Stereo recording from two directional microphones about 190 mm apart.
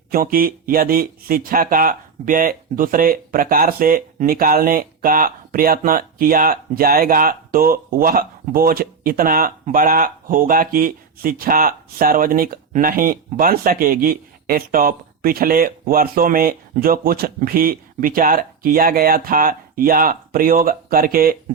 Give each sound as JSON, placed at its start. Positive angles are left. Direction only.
{"t": 0.1, "sound": "speech", "side_deg": -50}